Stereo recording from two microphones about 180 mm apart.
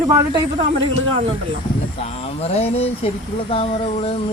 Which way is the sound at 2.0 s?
35° left (ahead or behind).